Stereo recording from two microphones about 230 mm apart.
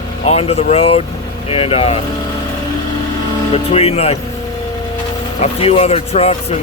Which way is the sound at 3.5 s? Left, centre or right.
Left.